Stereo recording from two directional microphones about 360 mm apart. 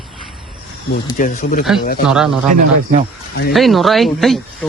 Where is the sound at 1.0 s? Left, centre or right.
Left.